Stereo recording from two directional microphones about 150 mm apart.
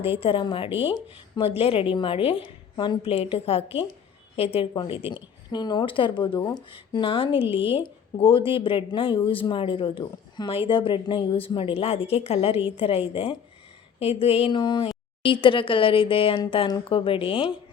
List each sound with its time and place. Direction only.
0.0 s speech: 40° left (ahead or behind)